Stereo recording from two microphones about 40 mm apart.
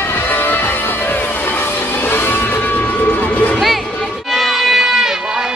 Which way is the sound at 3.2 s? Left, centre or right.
Left.